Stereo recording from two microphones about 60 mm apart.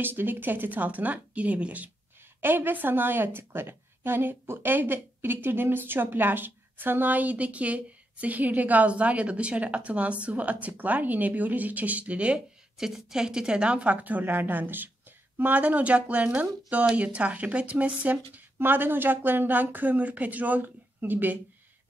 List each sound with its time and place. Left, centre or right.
0.0 s speech: right
2.4 s a woman's voice: right
12.7 s speech: centre; by 21.4 s right